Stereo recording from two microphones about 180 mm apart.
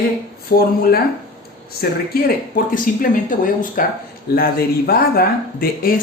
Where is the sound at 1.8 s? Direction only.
60° left (ahead or behind).